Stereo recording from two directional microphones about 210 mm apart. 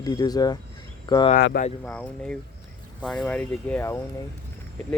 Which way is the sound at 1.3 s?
45° left (ahead or behind).